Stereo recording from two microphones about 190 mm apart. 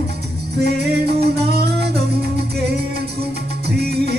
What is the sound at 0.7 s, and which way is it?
Music, 60° right (ahead or behind).